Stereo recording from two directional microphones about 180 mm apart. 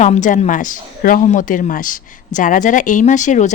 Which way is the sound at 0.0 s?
45° left (ahead or behind).